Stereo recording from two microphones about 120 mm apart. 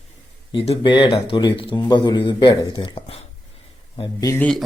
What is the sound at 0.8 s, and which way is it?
Speech, 40° left (ahead or behind).